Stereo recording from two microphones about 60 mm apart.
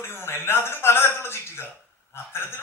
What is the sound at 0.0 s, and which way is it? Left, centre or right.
A man's voice, left.